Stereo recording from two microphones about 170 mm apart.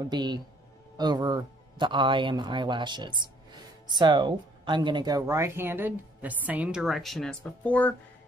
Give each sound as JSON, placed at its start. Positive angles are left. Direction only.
{"t": 0.1, "sound": "speech", "side_deg": -25}